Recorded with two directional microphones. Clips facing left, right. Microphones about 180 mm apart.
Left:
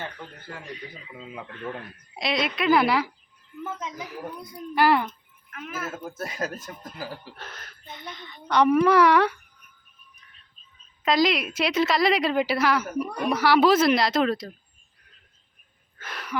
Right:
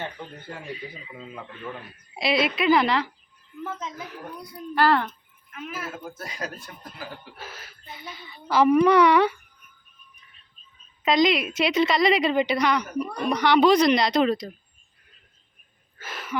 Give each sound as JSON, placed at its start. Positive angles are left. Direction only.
{"t": 0.2, "sound": "speech", "side_deg": -20}
{"t": 0.6, "sound": "a woman's voice", "side_deg": -5}
{"t": 6.2, "sound": "speech", "side_deg": 50}
{"t": 7.3, "sound": "a woman's voice", "side_deg": -5}
{"t": 11.0, "sound": "a woman's voice", "side_deg": 0}
{"t": 16.0, "sound": "a sound", "side_deg": 0}